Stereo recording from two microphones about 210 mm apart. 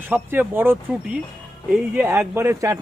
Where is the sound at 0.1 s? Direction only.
10° right (ahead or behind).